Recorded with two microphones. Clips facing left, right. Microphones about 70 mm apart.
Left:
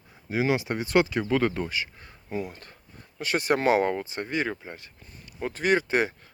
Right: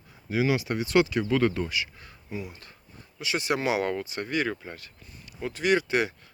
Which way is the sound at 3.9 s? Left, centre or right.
Left.